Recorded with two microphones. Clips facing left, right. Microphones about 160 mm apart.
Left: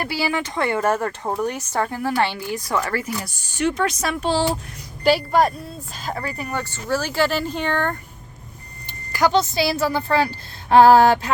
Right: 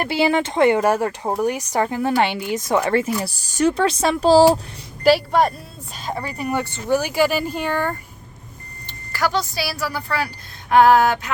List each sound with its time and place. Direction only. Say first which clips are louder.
0.0 s speech: right 5 dB; 25° right (ahead or behind)
5.0 s speech: right 2 dB; centre (ahead or behind)
6.1 s speech: right 3 dB; 20° right (ahead or behind)
9.1 s a woman's voice: left 4 dB; 20° left (ahead or behind)
10.7 s a sound: left 2 dB; 30° left (ahead or behind)